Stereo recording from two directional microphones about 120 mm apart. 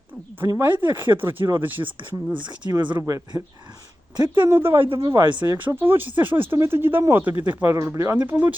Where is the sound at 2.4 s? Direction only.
40° right (ahead or behind).